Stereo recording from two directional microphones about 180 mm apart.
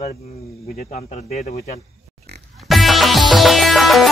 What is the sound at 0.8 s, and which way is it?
Speech, 40° left (ahead or behind).